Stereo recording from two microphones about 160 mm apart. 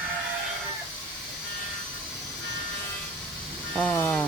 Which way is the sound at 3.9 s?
10° left (ahead or behind).